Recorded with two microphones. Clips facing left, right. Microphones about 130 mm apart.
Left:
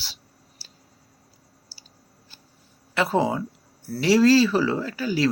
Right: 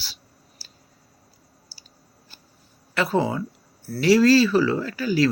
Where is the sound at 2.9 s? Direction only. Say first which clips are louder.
Even; 20° left (ahead or behind).